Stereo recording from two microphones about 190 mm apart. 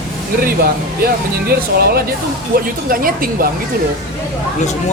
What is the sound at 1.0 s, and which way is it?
Speech, 55° right (ahead or behind).